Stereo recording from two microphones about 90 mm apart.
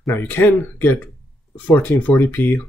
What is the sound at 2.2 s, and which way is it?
Speech, 20° left (ahead or behind).